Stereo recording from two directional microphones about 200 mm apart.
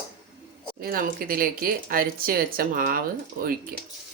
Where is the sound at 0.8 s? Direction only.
45° right (ahead or behind).